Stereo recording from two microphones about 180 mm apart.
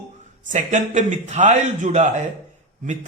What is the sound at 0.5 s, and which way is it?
A man's voice, 45° right (ahead or behind).